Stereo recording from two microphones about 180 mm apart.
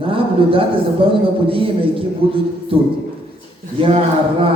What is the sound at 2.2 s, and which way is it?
Speech, 30° right (ahead or behind).